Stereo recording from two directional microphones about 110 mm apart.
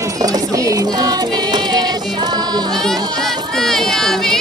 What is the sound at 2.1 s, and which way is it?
Music, 40° right (ahead or behind).